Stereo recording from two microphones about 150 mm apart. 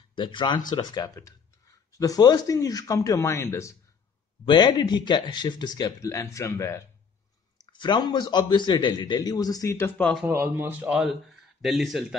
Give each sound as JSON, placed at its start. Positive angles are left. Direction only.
{"t": 0.1, "sound": "a man's voice", "side_deg": 35}
{"t": 4.5, "sound": "a man's voice", "side_deg": 30}
{"t": 7.6, "sound": "a man's voice", "side_deg": 30}
{"t": 10.2, "sound": "speech", "side_deg": -15}